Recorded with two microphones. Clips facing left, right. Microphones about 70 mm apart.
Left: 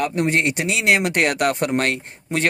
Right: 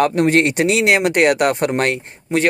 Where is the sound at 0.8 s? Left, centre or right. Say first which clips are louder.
Right 2 dB; right.